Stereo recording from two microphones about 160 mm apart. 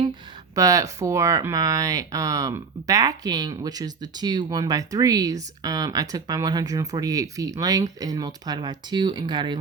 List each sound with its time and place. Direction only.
0.5 s speech: 20° right (ahead or behind)